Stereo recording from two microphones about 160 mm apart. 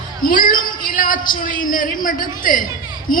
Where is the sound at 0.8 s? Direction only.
60° left (ahead or behind).